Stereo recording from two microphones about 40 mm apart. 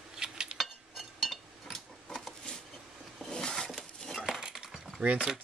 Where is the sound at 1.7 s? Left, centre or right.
Centre.